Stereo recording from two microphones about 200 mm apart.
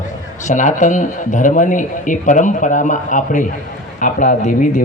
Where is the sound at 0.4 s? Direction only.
40° left (ahead or behind).